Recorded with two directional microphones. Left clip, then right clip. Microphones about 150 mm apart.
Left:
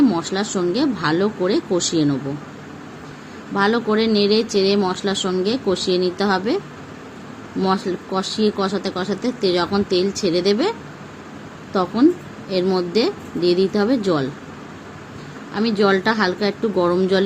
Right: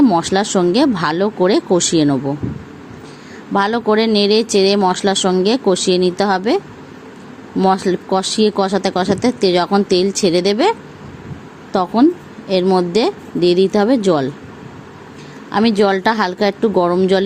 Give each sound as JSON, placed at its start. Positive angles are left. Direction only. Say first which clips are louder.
{"t": 0.1, "sound": "speech", "louder": "right 7 dB", "side_deg": -55}
{"t": 3.5, "sound": "speech", "louder": "right 4 dB", "side_deg": -60}
{"t": 7.6, "sound": "speech", "louder": "right 6 dB", "side_deg": -55}
{"t": 15.5, "sound": "speech", "louder": "right 4 dB", "side_deg": -55}